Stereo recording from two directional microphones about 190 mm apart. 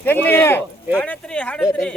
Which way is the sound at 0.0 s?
10° left (ahead or behind).